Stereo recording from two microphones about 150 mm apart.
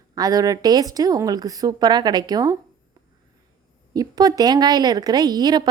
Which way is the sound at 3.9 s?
25° right (ahead or behind).